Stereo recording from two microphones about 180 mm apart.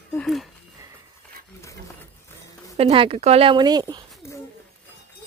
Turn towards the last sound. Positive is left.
turn(degrees=15)  # may be behind; listen again after turning